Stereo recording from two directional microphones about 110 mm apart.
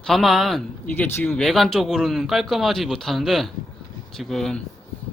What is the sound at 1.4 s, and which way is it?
Speech, centre (ahead or behind).